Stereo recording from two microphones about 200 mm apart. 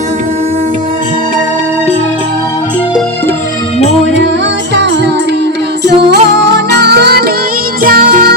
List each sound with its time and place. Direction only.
4.7 s music: 60° right (ahead or behind)